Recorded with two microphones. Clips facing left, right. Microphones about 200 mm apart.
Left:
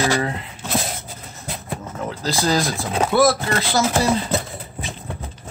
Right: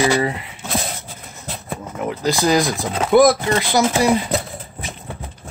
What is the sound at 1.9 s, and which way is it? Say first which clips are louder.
Speech: right 6 dB; 15° right (ahead or behind).